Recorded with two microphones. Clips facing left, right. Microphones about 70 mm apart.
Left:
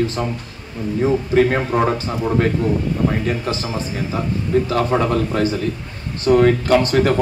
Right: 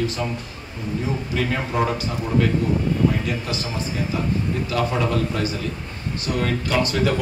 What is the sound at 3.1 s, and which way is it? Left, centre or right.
Speech, left.